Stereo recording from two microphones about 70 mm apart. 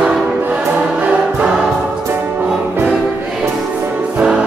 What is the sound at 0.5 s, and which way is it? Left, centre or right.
Choir, centre.